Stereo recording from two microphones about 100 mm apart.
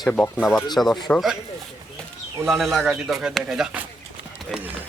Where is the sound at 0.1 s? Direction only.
10° left (ahead or behind).